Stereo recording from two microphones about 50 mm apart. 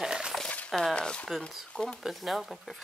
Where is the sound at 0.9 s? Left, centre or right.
Left.